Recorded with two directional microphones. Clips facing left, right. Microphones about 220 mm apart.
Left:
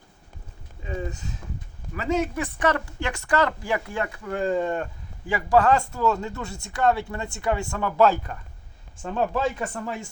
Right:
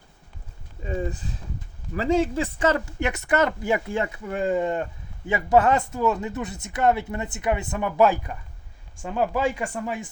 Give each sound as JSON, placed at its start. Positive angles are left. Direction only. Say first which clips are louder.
{"t": 0.9, "sound": "speech", "louder": "right 3 dB", "side_deg": -35}